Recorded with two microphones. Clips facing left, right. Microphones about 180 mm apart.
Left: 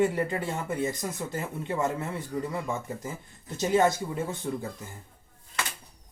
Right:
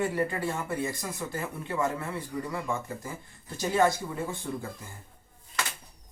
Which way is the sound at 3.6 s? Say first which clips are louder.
Left 2 dB; 20° left (ahead or behind).